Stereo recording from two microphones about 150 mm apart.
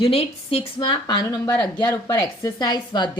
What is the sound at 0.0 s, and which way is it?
A woman's voice, 40° left (ahead or behind).